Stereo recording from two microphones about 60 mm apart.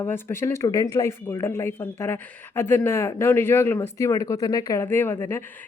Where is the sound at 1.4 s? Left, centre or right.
Left.